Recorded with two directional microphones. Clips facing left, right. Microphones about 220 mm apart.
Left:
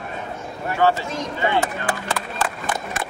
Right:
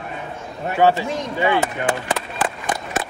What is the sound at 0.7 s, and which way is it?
Speech, 20° right (ahead or behind).